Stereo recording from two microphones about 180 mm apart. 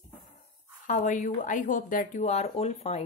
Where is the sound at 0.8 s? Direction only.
45° left (ahead or behind).